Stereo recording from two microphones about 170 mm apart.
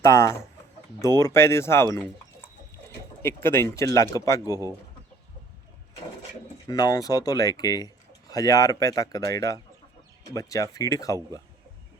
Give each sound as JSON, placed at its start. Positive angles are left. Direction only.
{"t": 0.0, "sound": "speech", "side_deg": 15}
{"t": 4.4, "sound": "speech", "side_deg": -20}
{"t": 6.7, "sound": "speech", "side_deg": 20}